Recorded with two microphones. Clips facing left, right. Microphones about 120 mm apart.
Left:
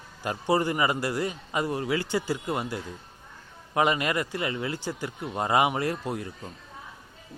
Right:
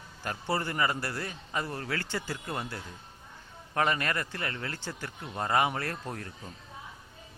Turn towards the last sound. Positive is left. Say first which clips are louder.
# left 6 dB
turn(degrees=10)  # may be behind; listen again after turning